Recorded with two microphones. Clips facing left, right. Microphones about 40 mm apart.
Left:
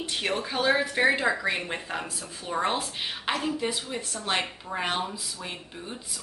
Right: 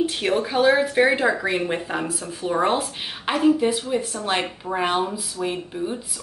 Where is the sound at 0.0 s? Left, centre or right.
Centre.